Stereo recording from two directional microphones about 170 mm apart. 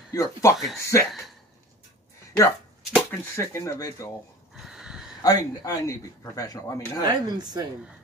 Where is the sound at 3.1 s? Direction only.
15° left (ahead or behind).